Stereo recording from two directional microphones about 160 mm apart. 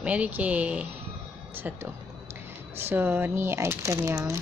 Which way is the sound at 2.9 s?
10° right (ahead or behind).